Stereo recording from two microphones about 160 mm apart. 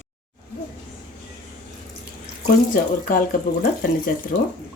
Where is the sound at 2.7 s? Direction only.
65° left (ahead or behind).